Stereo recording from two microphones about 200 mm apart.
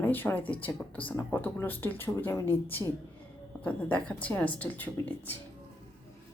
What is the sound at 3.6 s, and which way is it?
Speech, 5° left (ahead or behind).